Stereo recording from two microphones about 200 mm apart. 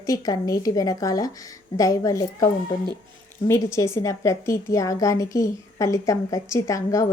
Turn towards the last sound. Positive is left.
turn(degrees=15)  # may be behind; listen again after turning